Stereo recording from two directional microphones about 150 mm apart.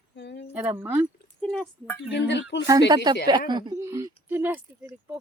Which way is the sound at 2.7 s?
25° right (ahead or behind).